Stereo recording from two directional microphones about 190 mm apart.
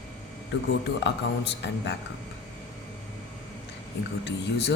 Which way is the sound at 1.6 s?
65° left (ahead or behind).